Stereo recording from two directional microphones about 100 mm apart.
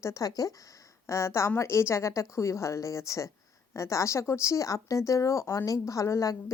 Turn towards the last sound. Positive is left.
turn(degrees=35)  # may be behind; listen again after turning